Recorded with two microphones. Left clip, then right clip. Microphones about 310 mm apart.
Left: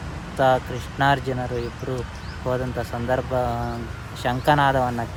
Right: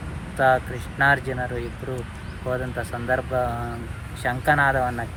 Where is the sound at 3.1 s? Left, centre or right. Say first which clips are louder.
Even; centre.